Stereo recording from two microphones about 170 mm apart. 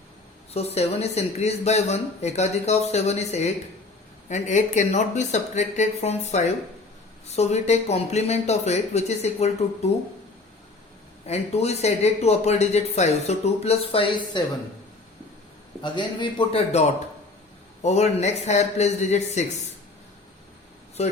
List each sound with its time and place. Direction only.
0.5 s speech: 35° left (ahead or behind)
11.3 s speech: 40° left (ahead or behind)
15.8 s speech: 25° left (ahead or behind)
17.8 s speech: 40° left (ahead or behind)
21.0 s speech: 40° left (ahead or behind)